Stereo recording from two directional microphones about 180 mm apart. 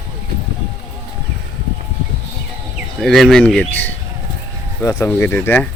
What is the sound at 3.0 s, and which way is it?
Speech, centre (ahead or behind).